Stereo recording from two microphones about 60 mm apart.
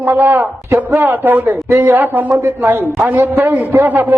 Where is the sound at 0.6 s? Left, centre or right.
Right.